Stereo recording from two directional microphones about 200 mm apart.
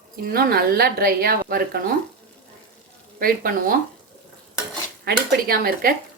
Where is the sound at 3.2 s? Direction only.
45° right (ahead or behind).